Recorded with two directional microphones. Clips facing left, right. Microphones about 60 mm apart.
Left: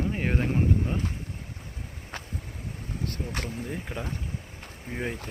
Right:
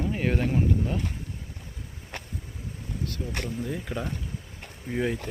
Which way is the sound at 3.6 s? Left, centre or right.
Left.